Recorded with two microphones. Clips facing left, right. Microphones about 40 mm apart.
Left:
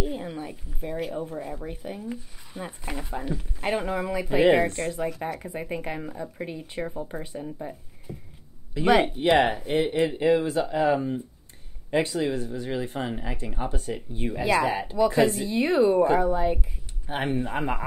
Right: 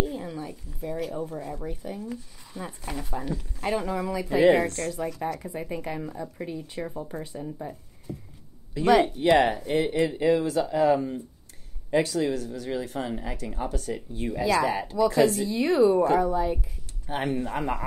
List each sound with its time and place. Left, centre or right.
0.0 s speech: left
1.7 s speech: left
6.9 s speech: centre
8.7 s speech: left